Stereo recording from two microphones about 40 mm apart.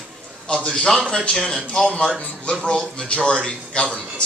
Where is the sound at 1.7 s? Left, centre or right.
Left.